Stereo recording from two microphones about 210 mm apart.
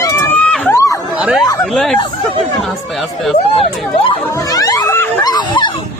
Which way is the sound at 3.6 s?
25° left (ahead or behind).